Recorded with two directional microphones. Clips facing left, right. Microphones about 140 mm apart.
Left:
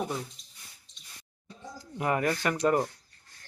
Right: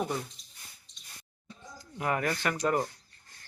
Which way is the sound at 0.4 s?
Centre (ahead or behind).